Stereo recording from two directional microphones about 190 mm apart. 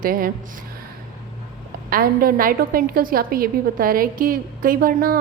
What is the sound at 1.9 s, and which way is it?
A woman's voice, 50° right (ahead or behind).